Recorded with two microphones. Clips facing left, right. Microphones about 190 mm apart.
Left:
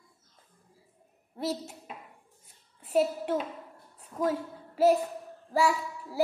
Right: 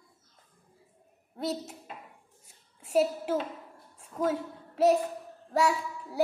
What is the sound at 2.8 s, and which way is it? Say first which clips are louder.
A woman's voice: even; centre (ahead or behind).